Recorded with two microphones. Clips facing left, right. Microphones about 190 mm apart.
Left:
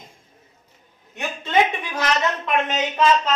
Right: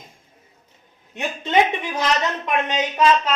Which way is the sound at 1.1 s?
20° right (ahead or behind).